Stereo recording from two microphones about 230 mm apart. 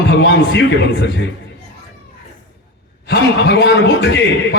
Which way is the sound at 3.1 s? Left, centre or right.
Left.